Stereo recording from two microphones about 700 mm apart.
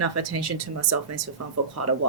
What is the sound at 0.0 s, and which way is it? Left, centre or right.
Speech, right.